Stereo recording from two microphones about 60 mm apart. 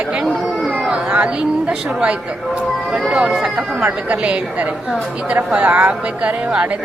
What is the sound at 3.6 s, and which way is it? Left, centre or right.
Speech, right.